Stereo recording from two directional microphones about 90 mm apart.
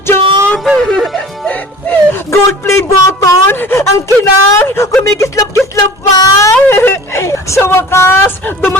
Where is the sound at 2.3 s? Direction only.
30° left (ahead or behind).